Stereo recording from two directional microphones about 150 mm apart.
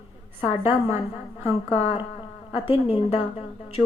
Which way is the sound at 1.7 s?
40° left (ahead or behind).